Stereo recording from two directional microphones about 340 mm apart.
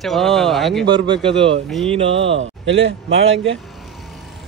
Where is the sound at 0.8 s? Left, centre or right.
Centre.